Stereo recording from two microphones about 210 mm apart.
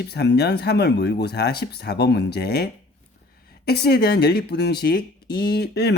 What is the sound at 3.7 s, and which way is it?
Speech, 50° left (ahead or behind).